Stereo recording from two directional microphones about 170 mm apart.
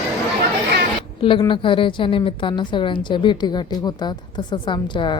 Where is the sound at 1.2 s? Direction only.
30° left (ahead or behind).